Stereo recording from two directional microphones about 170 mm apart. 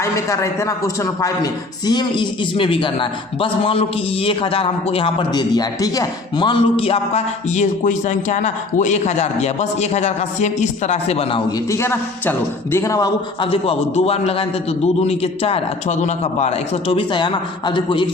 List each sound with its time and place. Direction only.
0.0 s a man's voice: 20° left (ahead or behind); by 11.4 s 35° left (ahead or behind)
11.7 s a man's voice: 15° left (ahead or behind)
13.5 s a man's voice: 35° left (ahead or behind)